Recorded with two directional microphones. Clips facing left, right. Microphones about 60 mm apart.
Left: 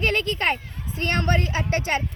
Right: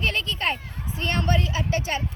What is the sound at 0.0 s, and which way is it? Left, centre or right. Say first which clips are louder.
A woman's voice: left 3 dB; left.